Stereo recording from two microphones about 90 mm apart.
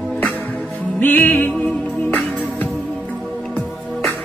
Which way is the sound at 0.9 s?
20° left (ahead or behind).